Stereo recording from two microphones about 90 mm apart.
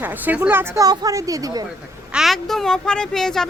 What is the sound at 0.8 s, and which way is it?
Speech, 40° right (ahead or behind).